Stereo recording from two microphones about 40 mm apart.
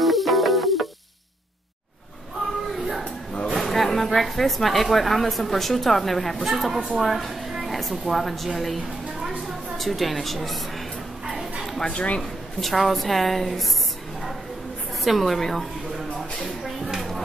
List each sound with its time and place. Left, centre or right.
0.0 s music: centre
3.5 s a woman's voice: centre
11.8 s speech: left
12.2 s a woman's voice: centre
15.0 s a woman's voice: centre
16.2 s a sound: centre